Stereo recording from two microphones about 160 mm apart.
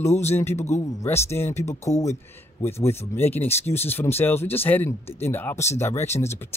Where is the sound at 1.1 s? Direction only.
15° left (ahead or behind).